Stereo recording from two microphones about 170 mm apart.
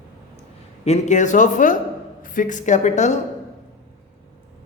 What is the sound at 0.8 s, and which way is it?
A woman's voice, 45° left (ahead or behind).